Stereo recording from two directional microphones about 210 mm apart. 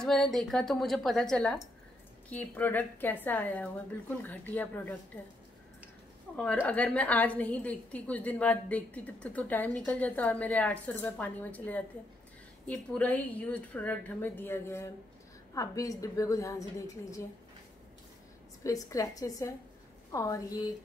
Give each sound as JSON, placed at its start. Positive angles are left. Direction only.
{"t": 0.0, "sound": "a woman's voice", "side_deg": 0}
{"t": 6.3, "sound": "a woman's voice", "side_deg": 5}
{"t": 18.6, "sound": "a woman's voice", "side_deg": 15}